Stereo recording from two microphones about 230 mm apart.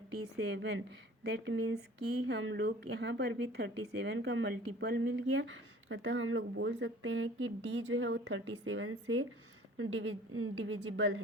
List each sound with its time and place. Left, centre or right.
0.5 s speech: right